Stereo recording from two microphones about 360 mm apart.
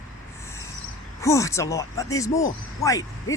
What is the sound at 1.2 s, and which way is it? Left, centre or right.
Speech, centre.